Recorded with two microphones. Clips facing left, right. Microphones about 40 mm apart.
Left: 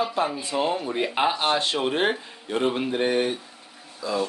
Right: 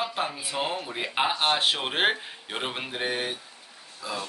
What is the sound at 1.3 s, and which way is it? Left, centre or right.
Speech, right.